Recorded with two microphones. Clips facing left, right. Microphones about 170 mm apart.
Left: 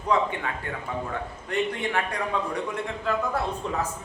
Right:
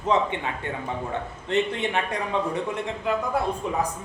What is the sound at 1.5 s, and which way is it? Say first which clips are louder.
Speech: right 3 dB; 25° right (ahead or behind).